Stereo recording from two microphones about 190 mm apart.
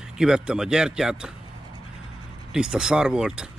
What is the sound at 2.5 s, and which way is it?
A man's voice, 5° right (ahead or behind).